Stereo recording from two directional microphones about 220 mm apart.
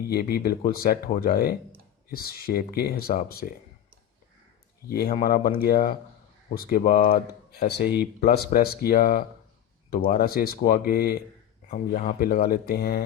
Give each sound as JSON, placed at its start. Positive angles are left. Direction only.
{"t": 0.1, "sound": "speech", "side_deg": 45}
{"t": 4.9, "sound": "speech", "side_deg": 40}